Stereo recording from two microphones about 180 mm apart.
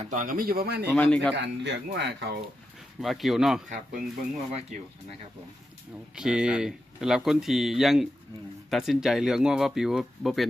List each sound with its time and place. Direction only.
0.1 s speech: 45° right (ahead or behind)
0.9 s a man's voice: 5° left (ahead or behind)
1.4 s speech: 75° right (ahead or behind)
3.0 s speech: centre (ahead or behind)
4.5 s speech: 40° right (ahead or behind)
6.1 s speech: 5° right (ahead or behind)